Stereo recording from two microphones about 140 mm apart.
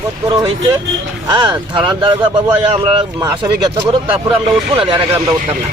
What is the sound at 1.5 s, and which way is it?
Speech, 35° right (ahead or behind).